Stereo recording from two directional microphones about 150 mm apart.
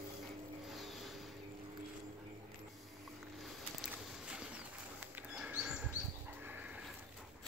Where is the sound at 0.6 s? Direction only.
Centre (ahead or behind).